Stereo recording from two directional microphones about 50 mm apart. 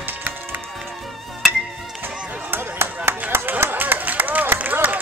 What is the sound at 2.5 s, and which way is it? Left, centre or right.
Chop, right.